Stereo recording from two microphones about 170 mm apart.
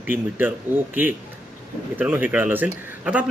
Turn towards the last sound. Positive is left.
turn(degrees=-10)  # may be behind; listen again after turning